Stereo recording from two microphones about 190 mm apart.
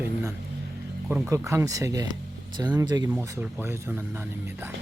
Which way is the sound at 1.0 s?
5° right (ahead or behind).